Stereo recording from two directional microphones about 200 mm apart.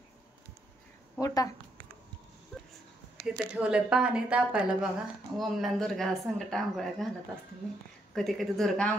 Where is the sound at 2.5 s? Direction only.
Centre (ahead or behind).